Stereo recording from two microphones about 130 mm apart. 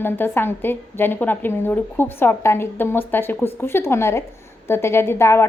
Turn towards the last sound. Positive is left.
turn(degrees=20)  # may be behind; listen again after turning